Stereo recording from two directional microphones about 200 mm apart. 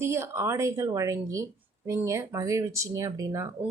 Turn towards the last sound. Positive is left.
turn(degrees=-15)  # may be behind; listen again after turning